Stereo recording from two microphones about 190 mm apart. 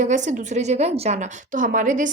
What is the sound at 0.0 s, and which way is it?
A woman's voice, 40° right (ahead or behind).